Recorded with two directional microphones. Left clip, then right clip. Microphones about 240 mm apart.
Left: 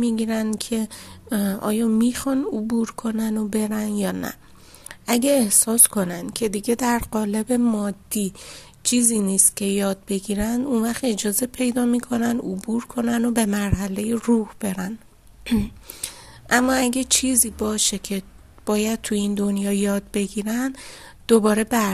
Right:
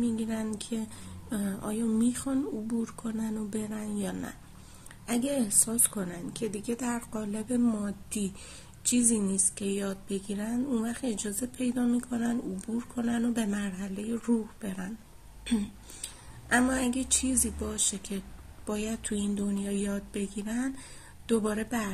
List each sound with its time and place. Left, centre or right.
0.0 s a woman's voice: left